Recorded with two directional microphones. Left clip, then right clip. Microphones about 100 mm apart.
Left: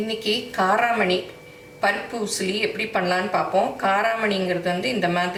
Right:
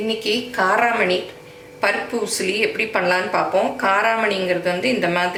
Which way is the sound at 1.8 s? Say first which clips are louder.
Right 3 dB; 20° right (ahead or behind).